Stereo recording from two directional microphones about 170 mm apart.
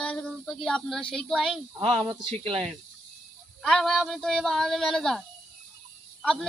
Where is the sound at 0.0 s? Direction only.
5° left (ahead or behind).